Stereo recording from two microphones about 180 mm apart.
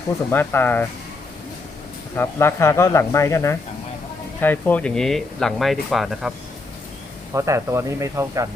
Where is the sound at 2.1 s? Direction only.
15° left (ahead or behind).